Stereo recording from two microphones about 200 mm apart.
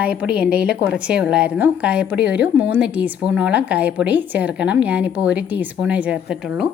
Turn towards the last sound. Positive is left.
turn(degrees=-5)  # may be behind; listen again after turning